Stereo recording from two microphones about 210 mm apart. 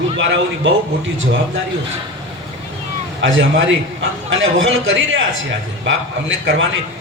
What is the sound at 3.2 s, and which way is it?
A man's voice, 65° right (ahead or behind).